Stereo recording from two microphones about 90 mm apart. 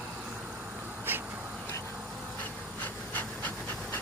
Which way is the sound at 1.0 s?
25° right (ahead or behind).